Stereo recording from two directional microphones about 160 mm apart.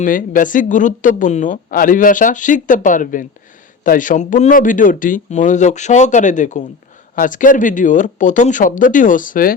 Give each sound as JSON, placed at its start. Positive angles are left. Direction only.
{"t": 0.0, "sound": "speech", "side_deg": 55}